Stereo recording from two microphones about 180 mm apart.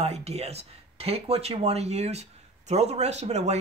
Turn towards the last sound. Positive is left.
turn(degrees=-40)  # may be behind; listen again after turning